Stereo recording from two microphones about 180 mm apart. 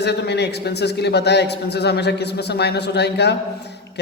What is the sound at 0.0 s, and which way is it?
A man's voice, 65° left (ahead or behind).